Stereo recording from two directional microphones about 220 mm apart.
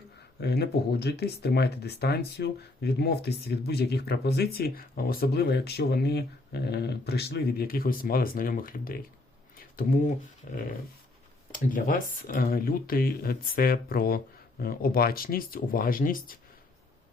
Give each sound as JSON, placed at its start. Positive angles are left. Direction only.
{"t": 0.3, "sound": "speech", "side_deg": 45}
{"t": 9.6, "sound": "a sound", "side_deg": 40}
{"t": 11.5, "sound": "speech", "side_deg": 40}